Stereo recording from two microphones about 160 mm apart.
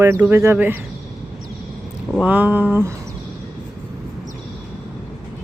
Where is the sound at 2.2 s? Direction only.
10° right (ahead or behind).